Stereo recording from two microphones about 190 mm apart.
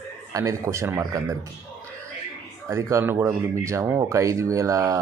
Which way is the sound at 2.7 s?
15° right (ahead or behind).